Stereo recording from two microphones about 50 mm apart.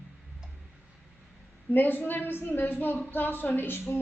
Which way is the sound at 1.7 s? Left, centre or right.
Left.